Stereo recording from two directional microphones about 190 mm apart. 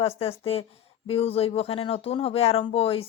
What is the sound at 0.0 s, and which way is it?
Speech, 30° left (ahead or behind).